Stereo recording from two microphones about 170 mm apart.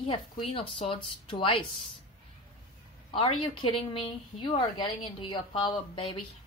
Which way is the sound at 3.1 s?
30° left (ahead or behind).